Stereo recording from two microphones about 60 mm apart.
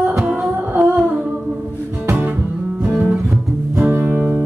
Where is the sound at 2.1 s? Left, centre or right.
Right.